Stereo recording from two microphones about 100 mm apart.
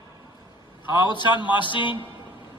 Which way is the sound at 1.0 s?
50° left (ahead or behind).